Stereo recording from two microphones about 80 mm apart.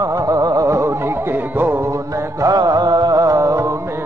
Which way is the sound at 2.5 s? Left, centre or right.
Right.